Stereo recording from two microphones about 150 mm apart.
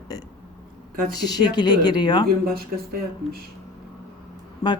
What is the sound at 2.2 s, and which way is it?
Speech, 90° right.